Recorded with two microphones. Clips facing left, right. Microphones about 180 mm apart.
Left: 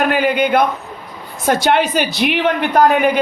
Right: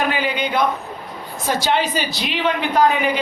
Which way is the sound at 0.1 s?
50° left (ahead or behind).